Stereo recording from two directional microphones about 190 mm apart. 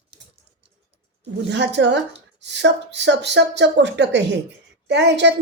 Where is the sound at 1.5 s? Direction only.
65° right (ahead or behind).